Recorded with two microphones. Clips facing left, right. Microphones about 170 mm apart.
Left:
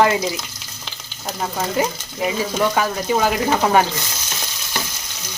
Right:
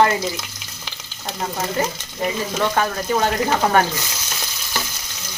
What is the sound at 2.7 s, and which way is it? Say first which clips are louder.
Speech: left 1 dB; 5° left (ahead or behind).